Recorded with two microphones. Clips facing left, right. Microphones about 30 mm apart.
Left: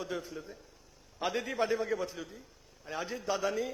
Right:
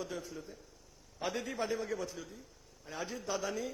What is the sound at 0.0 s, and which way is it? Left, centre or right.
A man's voice, left.